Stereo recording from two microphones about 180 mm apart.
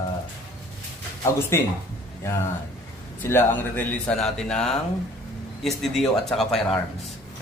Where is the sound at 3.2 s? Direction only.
10° left (ahead or behind).